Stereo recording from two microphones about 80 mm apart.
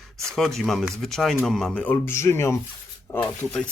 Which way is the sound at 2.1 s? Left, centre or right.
Left.